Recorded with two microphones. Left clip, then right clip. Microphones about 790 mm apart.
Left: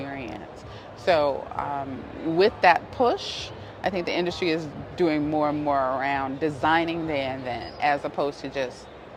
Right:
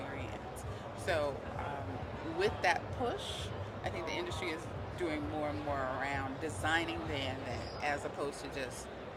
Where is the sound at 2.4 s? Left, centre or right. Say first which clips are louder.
Left 13 dB; left.